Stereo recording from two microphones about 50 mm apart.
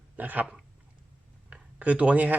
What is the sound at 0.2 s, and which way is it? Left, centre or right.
Speech, right.